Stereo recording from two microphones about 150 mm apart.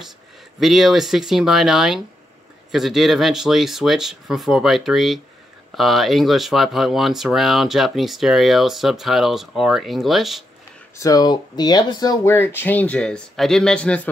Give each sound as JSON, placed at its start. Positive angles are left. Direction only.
{"t": 0.6, "sound": "speech", "side_deg": 0}
{"t": 11.0, "sound": "speech", "side_deg": 25}
{"t": 12.3, "sound": "speech", "side_deg": 15}